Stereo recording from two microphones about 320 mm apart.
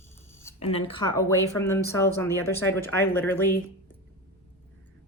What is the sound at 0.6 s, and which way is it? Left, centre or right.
A woman's voice, centre.